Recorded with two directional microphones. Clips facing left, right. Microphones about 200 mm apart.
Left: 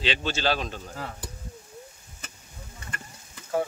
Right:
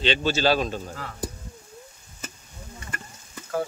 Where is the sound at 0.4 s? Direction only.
40° right (ahead or behind).